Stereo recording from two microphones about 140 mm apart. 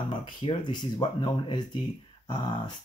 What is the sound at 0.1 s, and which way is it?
Speech, 30° left (ahead or behind).